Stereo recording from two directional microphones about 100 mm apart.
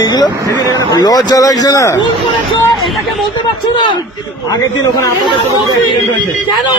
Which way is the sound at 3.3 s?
50° left (ahead or behind).